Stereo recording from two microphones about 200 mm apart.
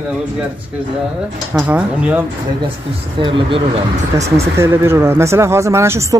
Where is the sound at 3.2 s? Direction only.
25° right (ahead or behind).